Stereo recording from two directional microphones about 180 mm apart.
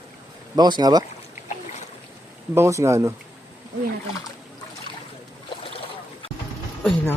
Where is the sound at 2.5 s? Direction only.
15° right (ahead or behind).